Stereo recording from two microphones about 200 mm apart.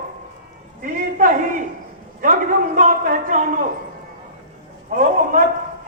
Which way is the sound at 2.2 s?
40° right (ahead or behind).